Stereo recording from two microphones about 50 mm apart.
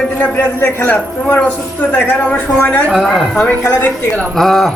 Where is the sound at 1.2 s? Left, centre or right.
Left.